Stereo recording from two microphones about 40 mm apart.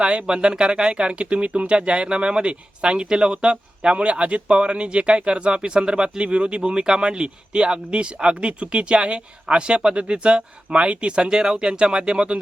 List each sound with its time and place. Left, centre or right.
0.0 s speech: right